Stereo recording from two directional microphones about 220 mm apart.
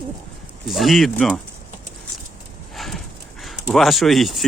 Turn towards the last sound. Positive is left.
turn(degrees=0)  # may be behind; listen again after turning